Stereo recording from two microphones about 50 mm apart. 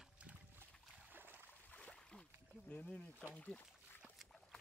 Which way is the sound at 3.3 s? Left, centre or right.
Left.